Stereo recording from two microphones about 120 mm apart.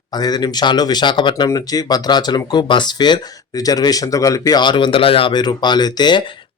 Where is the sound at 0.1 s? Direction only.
35° left (ahead or behind).